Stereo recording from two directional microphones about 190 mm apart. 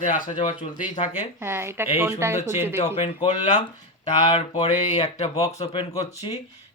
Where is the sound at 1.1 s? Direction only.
10° right (ahead or behind).